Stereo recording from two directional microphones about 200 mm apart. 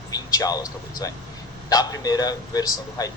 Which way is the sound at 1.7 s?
20° left (ahead or behind).